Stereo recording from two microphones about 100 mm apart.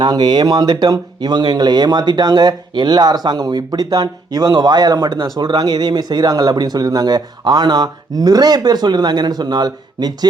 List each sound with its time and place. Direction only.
0.0 s speech: 45° right (ahead or behind)